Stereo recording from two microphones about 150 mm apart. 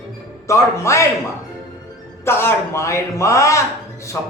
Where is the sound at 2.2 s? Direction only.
15° left (ahead or behind).